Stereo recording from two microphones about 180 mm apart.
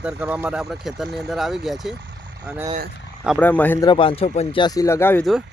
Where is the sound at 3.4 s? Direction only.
10° left (ahead or behind).